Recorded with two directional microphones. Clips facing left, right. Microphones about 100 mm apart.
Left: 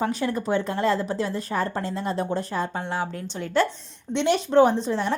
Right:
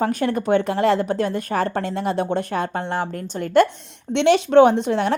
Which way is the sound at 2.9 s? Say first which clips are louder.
Right 4 dB; 50° right (ahead or behind).